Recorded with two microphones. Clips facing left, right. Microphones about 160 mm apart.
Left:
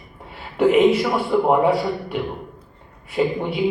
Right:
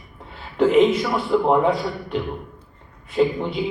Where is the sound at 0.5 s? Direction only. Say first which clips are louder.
Left 1 dB; 10° left (ahead or behind).